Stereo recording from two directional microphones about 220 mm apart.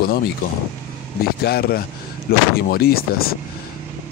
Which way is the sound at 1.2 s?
45° left (ahead or behind).